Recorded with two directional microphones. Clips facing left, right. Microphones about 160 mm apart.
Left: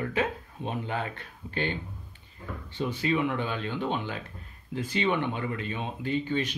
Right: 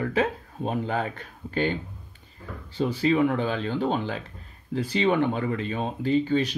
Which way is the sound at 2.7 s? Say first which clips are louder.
Right 5 dB; 35° right (ahead or behind).